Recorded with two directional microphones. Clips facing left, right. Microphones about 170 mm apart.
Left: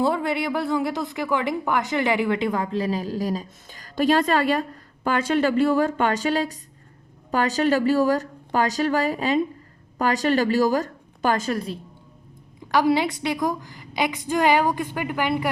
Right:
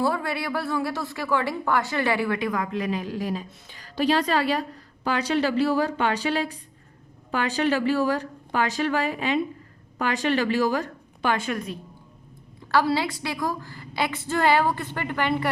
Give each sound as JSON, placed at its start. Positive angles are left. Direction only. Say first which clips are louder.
{"t": 0.0, "sound": "a woman's voice", "louder": "left 3 dB", "side_deg": 20}
{"t": 12.7, "sound": "a woman's voice", "louder": "left 3 dB", "side_deg": 20}